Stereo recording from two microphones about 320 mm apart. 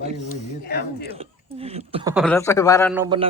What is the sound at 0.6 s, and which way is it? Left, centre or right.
Speech, left.